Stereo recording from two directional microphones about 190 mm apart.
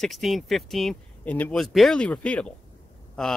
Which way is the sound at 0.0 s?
Centre (ahead or behind).